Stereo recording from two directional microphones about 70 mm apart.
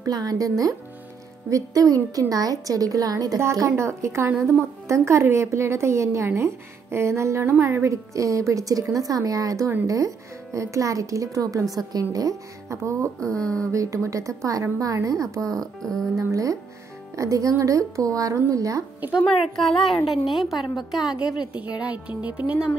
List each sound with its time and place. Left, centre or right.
0.0 s a woman's voice: right
3.5 s a woman's voice: right
13.4 s speech: centre
13.7 s a woman's voice: right
15.5 s speech: centre
16.2 s a woman's voice: right
19.2 s a woman's voice: centre
21.8 s speech: centre